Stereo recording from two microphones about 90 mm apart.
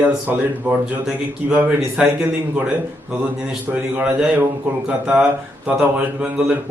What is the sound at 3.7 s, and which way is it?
A man's voice, 15° right (ahead or behind).